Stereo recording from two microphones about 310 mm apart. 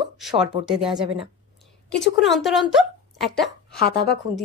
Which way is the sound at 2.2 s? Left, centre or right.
Centre.